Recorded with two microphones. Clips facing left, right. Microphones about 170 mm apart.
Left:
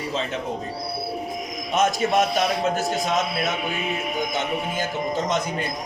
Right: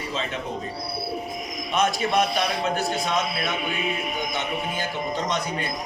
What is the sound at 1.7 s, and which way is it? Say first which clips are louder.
A man's voice: left 2 dB; 45° left (ahead or behind).